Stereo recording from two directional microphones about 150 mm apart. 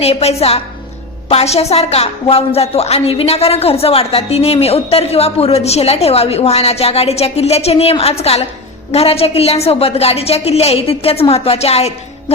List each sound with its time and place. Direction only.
0.0 s a woman's voice: 45° left (ahead or behind)